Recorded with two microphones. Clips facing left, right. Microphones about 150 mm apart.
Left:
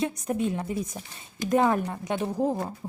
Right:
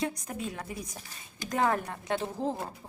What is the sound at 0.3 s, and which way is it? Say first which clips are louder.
A woman's voice: left 9 dB; 25° left (ahead or behind).